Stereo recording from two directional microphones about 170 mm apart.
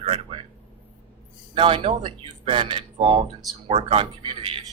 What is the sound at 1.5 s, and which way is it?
Speech, 30° right (ahead or behind).